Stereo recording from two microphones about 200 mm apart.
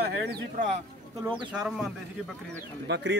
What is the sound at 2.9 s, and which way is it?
Speech, 60° right (ahead or behind).